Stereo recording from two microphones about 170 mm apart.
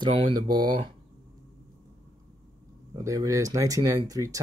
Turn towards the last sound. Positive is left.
turn(degrees=-20)  # may be behind; listen again after turning